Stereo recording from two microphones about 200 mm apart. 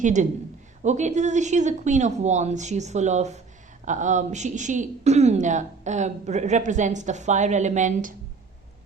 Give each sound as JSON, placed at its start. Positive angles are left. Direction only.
{"t": 0.0, "sound": "speech", "side_deg": -40}